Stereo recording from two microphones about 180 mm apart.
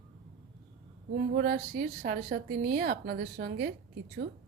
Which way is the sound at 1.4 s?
55° right (ahead or behind).